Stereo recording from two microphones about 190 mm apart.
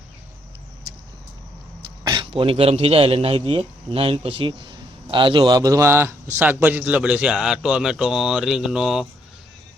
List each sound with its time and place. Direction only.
2.0 s a man's voice: 25° right (ahead or behind); by 9.0 s 5° right (ahead or behind)